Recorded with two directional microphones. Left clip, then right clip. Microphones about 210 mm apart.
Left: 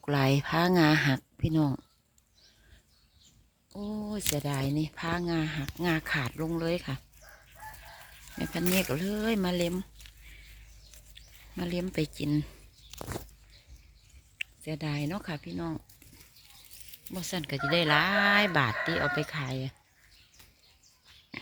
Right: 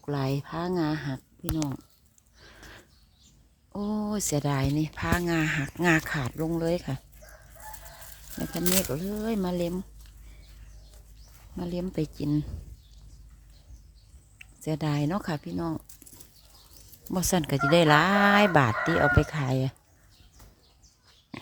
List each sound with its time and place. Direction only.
0.0 s speech: 10° left (ahead or behind)
3.7 s speech: 25° right (ahead or behind); by 7.0 s 5° right (ahead or behind)
8.4 s speech: centre (ahead or behind)
11.5 s speech: centre (ahead or behind)
14.6 s speech: 15° right (ahead or behind)
15.5 s speech: centre (ahead or behind)
17.2 s speech: 25° right (ahead or behind)